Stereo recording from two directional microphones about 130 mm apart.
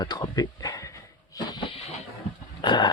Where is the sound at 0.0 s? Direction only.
30° left (ahead or behind).